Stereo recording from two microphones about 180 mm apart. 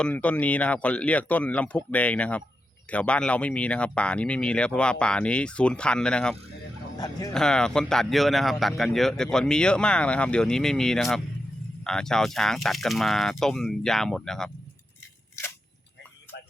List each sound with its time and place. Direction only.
0.0 s speech: 10° left (ahead or behind)
7.0 s speech: 20° left (ahead or behind)
7.3 s speech: 5° left (ahead or behind)